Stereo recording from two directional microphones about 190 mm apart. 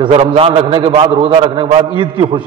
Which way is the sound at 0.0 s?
30° right (ahead or behind).